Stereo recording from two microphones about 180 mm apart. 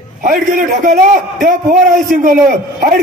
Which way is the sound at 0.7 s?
50° right (ahead or behind).